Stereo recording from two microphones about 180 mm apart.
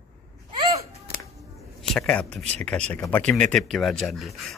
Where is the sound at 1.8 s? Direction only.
5° left (ahead or behind).